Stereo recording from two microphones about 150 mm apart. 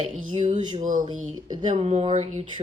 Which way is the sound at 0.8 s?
60° right (ahead or behind).